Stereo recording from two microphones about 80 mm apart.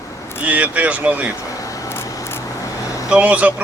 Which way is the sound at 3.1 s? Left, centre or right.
Centre.